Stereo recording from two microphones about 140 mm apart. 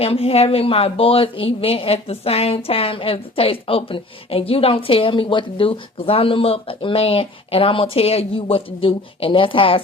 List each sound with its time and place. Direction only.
0.0 s a woman's voice: 45° left (ahead or behind)